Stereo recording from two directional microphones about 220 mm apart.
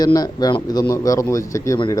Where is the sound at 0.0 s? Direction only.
15° left (ahead or behind).